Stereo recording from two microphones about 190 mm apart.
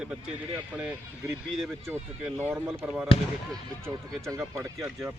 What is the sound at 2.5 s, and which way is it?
Speech, 5° right (ahead or behind).